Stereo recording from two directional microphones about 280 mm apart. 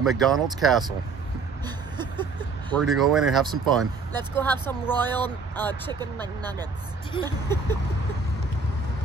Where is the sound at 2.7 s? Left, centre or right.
Centre.